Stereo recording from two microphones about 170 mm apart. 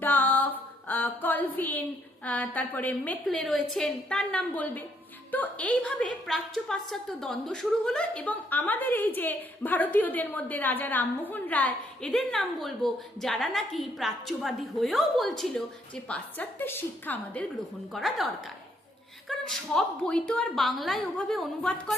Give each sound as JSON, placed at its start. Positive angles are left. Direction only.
{"t": 0.0, "sound": "a sound", "side_deg": 10}
{"t": 2.2, "sound": "a woman's voice", "side_deg": 10}
{"t": 17.9, "sound": "a woman's voice", "side_deg": 0}
{"t": 19.3, "sound": "a woman's voice", "side_deg": 0}